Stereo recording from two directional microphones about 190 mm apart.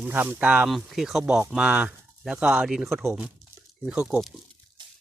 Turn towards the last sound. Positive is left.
turn(degrees=0)  # may be behind; listen again after turning